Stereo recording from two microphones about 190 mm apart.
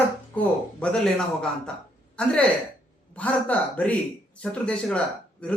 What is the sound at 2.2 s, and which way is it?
A man's voice, 5° left (ahead or behind).